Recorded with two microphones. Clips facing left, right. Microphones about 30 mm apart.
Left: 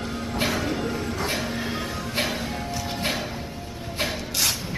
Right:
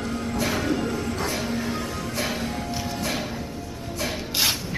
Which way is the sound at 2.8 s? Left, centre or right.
Left.